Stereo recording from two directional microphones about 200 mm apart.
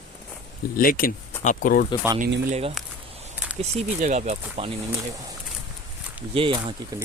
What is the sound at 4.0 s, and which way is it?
Speech, 35° right (ahead or behind).